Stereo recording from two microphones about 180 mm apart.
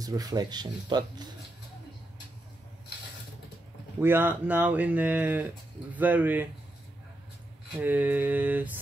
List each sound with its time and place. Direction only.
0.0 s speech: 20° right (ahead or behind)
4.0 s speech: 10° right (ahead or behind)
7.8 s speech: 10° right (ahead or behind)